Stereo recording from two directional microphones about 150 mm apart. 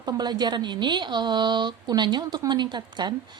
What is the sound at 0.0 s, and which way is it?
Speech, 30° right (ahead or behind).